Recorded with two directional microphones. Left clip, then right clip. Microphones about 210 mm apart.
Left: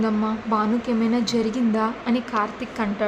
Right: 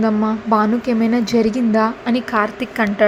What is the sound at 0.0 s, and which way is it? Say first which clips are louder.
A woman's voice: right 6 dB; 25° right (ahead or behind).